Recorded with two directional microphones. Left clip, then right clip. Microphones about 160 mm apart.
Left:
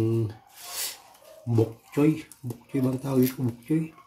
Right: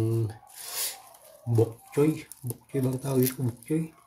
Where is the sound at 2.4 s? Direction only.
5° left (ahead or behind).